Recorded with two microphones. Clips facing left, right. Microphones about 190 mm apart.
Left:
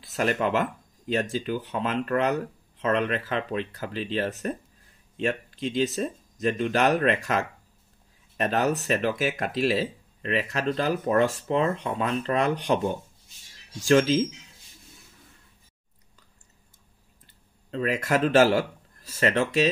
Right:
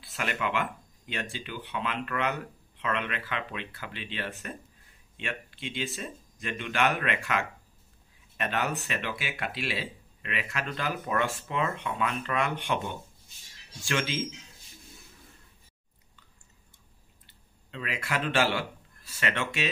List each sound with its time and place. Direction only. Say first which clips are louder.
0.0 s speech: left 7 dB; 40° left (ahead or behind)
17.6 s a man's voice: left 9 dB; 40° left (ahead or behind)